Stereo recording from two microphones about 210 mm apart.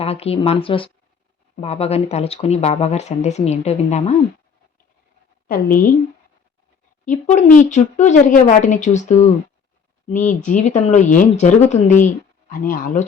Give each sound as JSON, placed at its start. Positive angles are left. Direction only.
{"t": 0.0, "sound": "speech", "side_deg": 30}
{"t": 5.5, "sound": "speech", "side_deg": 40}
{"t": 7.0, "sound": "speech", "side_deg": 35}